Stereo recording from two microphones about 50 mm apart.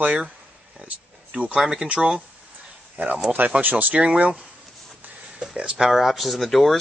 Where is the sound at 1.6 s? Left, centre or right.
Centre.